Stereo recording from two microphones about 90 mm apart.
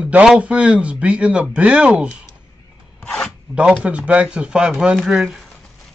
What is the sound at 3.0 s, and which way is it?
Zipper, 10° left (ahead or behind).